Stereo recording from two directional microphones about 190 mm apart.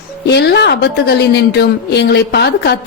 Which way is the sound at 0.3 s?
65° left (ahead or behind).